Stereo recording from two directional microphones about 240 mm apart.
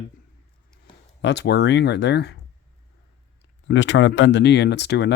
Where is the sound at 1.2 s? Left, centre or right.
Left.